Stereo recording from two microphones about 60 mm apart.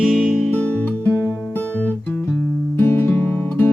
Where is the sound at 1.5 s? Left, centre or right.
Left.